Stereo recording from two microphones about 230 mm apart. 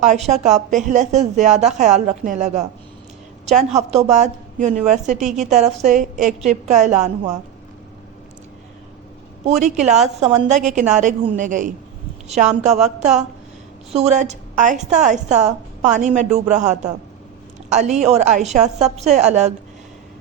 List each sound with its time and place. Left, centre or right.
0.4 s a woman's voice: right
9.4 s a woman's voice: right
13.9 s a woman's voice: right